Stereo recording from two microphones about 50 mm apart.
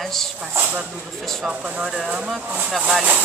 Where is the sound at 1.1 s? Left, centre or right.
Centre.